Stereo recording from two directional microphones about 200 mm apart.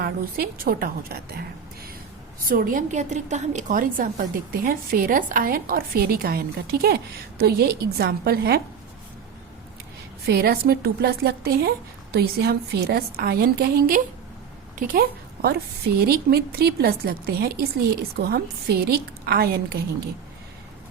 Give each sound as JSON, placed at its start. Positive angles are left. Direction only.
{"t": 0.0, "sound": "a woman's voice", "side_deg": -50}
{"t": 2.5, "sound": "a woman's voice", "side_deg": -45}
{"t": 10.2, "sound": "a woman's voice", "side_deg": -50}